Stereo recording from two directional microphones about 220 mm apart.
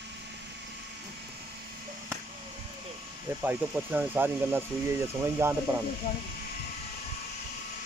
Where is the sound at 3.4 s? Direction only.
5° right (ahead or behind).